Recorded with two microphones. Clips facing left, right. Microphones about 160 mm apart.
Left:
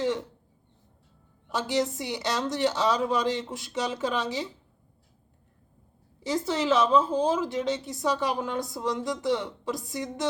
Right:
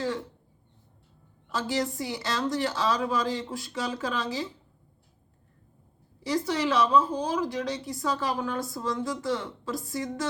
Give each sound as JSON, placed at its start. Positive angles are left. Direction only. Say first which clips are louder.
{"t": 1.5, "sound": "speech", "louder": "left 2 dB", "side_deg": 20}
{"t": 6.2, "sound": "speech", "louder": "left 1 dB", "side_deg": 25}